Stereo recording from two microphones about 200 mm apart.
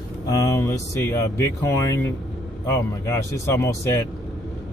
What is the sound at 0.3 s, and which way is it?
Speech, 15° left (ahead or behind).